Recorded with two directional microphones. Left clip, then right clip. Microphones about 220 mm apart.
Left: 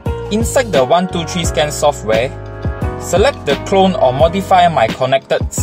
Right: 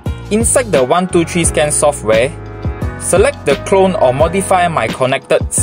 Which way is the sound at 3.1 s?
30° right (ahead or behind).